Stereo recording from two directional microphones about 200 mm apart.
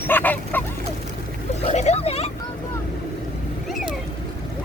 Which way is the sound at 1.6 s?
30° left (ahead or behind).